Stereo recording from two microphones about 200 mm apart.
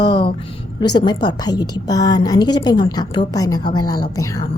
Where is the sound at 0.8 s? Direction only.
20° left (ahead or behind).